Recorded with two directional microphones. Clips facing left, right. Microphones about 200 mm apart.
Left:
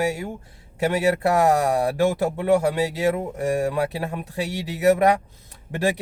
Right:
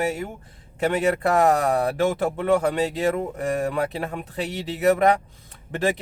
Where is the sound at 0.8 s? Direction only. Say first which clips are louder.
Left 1 dB; 10° left (ahead or behind).